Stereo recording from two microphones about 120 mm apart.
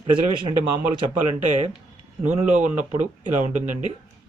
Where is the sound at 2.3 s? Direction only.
90° right.